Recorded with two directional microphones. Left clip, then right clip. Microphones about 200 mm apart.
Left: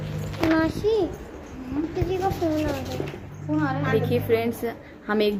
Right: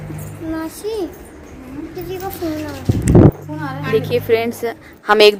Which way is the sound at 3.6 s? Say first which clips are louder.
Right 4 dB; 50° right (ahead or behind).